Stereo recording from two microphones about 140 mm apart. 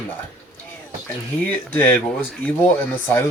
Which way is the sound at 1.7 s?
10° left (ahead or behind).